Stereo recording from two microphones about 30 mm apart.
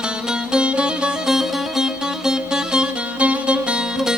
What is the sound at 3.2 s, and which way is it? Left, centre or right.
Music, right.